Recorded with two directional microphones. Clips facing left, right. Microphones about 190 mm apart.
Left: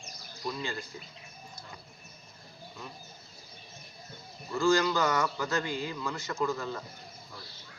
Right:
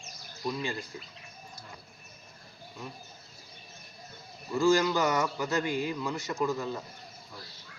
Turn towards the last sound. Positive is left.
turn(degrees=-15)  # may be behind; listen again after turning